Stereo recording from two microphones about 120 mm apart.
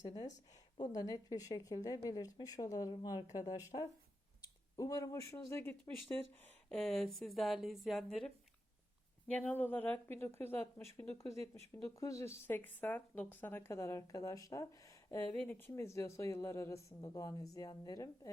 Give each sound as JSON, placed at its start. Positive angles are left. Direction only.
{"t": 0.8, "sound": "a woman's voice", "side_deg": 30}
{"t": 6.4, "sound": "speech", "side_deg": 5}
{"t": 9.2, "sound": "speech", "side_deg": 10}
{"t": 15.3, "sound": "speech", "side_deg": 15}